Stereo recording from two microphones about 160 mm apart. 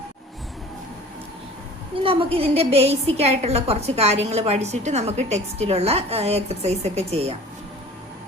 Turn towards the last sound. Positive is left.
turn(degrees=-40)  # may be behind; listen again after turning